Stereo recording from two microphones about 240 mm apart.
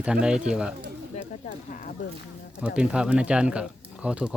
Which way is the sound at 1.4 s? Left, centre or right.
Left.